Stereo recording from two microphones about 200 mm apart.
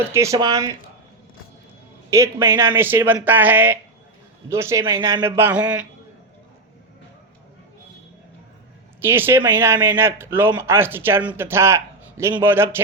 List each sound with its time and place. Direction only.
0.1 s speech: 15° right (ahead or behind)
2.0 s speech: 15° right (ahead or behind)
9.0 s speech: 10° right (ahead or behind)